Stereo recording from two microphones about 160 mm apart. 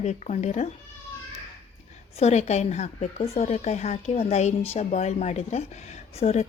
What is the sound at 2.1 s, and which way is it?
A woman's voice, 45° left (ahead or behind).